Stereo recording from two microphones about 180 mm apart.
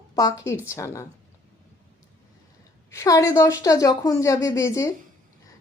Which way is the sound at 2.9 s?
15° left (ahead or behind).